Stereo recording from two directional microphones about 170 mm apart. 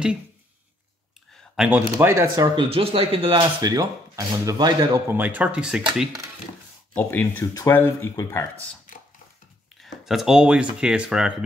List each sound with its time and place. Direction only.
1.7 s speech: 15° right (ahead or behind)
2.7 s speech: 35° right (ahead or behind); by 5.9 s 5° right (ahead or behind)
7.0 s speech: 10° left (ahead or behind)
9.8 s speech: centre (ahead or behind)